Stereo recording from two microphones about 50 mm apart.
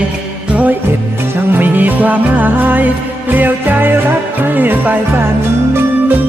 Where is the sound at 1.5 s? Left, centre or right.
Right.